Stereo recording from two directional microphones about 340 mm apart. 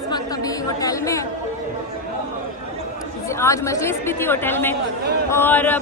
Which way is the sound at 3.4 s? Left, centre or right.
Centre.